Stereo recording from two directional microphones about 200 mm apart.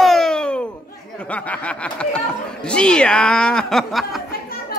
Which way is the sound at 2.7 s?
5° left (ahead or behind).